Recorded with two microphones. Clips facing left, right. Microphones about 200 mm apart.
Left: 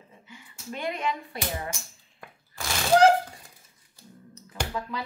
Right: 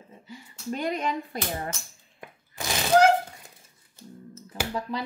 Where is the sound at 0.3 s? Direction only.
40° right (ahead or behind).